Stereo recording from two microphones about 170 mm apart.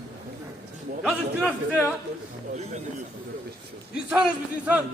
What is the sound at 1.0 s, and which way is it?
Speech, 5° right (ahead or behind).